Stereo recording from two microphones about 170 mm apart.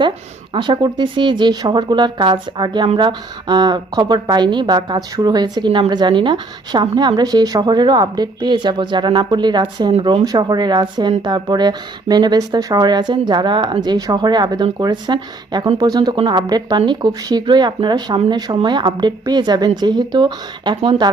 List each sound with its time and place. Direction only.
0.5 s speech: 25° right (ahead or behind)